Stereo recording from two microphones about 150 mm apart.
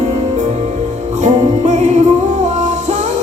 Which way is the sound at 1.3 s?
50° right (ahead or behind).